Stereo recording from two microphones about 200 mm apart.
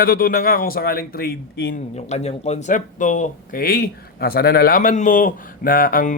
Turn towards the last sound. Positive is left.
turn(degrees=45)  # may be behind; listen again after turning